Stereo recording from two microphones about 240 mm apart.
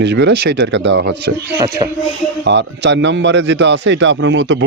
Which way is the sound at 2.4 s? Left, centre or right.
Right.